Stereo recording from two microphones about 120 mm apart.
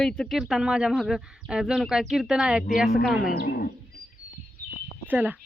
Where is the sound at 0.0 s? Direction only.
5° left (ahead or behind).